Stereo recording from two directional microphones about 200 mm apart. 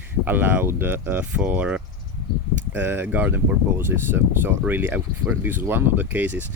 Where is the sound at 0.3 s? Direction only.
10° right (ahead or behind).